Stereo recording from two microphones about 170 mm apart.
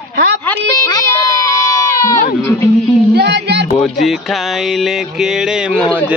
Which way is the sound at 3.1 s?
80° right.